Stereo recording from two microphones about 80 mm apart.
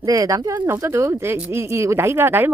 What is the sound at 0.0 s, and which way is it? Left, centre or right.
Speech, right.